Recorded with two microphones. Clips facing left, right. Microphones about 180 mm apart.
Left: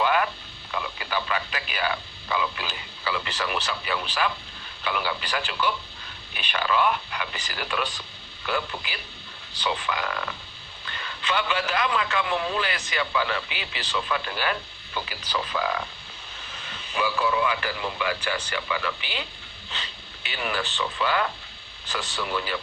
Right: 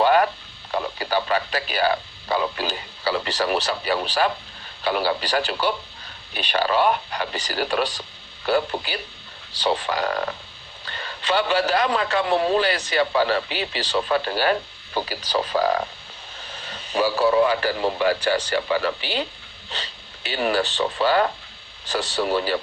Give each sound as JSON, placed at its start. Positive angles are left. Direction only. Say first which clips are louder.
{"t": 0.0, "sound": "radio", "louder": "right 6 dB", "side_deg": -40}
{"t": 0.7, "sound": "a man's voice", "louder": "right 6 dB", "side_deg": -40}